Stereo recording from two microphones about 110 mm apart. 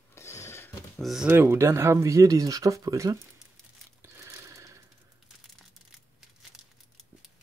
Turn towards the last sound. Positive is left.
turn(degrees=-5)  # may be behind; listen again after turning